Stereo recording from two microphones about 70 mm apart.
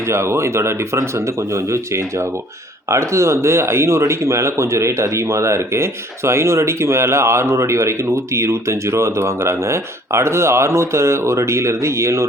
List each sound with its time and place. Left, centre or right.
0.0 s speech: right